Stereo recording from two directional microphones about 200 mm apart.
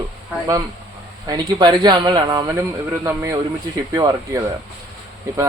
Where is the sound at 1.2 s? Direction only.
20° right (ahead or behind).